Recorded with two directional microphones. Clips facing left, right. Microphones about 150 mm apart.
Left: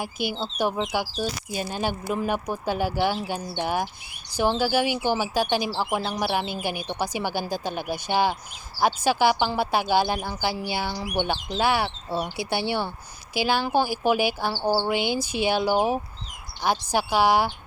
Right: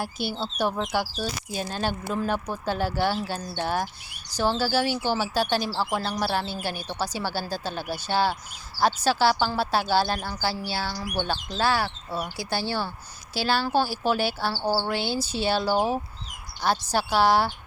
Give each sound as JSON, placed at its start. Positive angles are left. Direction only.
{"t": 0.8, "sound": "a woman's voice", "side_deg": 10}